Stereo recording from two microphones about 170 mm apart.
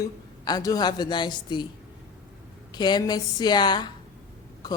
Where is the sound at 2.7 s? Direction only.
25° left (ahead or behind).